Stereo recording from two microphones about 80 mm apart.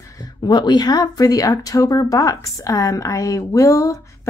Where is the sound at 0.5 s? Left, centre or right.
Left.